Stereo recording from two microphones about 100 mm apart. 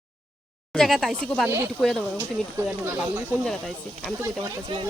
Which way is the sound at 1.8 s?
5° left (ahead or behind).